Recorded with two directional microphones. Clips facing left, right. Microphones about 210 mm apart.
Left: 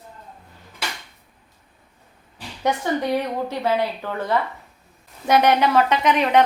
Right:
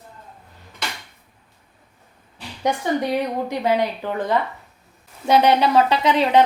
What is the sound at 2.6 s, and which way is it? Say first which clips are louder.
Speech: right 1 dB; 15° right (ahead or behind).